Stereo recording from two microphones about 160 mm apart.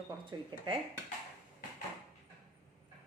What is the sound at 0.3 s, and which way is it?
Speech, 30° right (ahead or behind).